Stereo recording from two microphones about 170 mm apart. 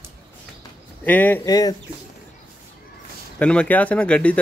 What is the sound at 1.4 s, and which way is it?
Speech, 20° left (ahead or behind).